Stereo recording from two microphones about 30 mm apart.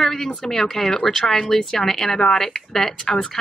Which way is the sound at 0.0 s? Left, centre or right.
Centre.